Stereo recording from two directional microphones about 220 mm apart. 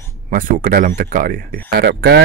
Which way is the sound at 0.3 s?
40° right (ahead or behind).